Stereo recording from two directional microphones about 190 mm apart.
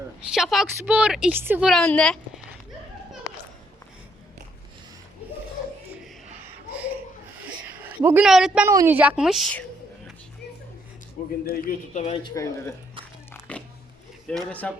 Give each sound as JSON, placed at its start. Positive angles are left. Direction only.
{"t": 0.3, "sound": "a woman's voice", "side_deg": 0}
{"t": 1.7, "sound": "a woman's voice", "side_deg": 5}
{"t": 6.2, "sound": "a sound", "side_deg": -10}
{"t": 7.9, "sound": "a woman's voice", "side_deg": -10}
{"t": 11.4, "sound": "a man's voice", "side_deg": 50}
{"t": 12.1, "sound": "speech", "side_deg": 20}
{"t": 13.5, "sound": "a sound", "side_deg": 5}
{"t": 14.3, "sound": "a woman's voice", "side_deg": 5}